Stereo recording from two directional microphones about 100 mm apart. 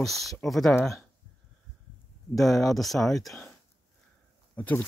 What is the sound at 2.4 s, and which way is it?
Speech, centre (ahead or behind).